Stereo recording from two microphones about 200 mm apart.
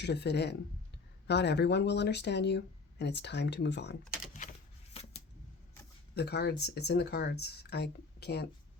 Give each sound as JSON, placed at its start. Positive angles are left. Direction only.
{"t": 0.0, "sound": "speech", "side_deg": 60}
{"t": 6.1, "sound": "speech", "side_deg": 55}